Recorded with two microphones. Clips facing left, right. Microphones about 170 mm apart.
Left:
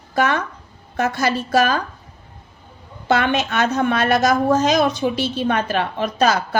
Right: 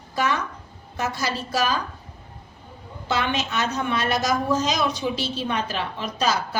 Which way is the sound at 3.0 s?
55° left (ahead or behind).